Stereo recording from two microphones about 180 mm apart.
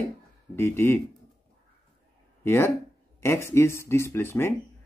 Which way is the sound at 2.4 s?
10° left (ahead or behind).